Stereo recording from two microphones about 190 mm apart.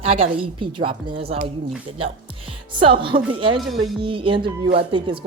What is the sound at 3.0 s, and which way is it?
A woman's voice, 25° right (ahead or behind).